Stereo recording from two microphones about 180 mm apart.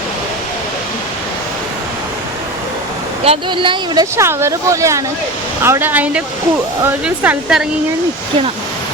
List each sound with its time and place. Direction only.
3.2 s speech: 25° right (ahead or behind)
4.2 s speech: 15° right (ahead or behind)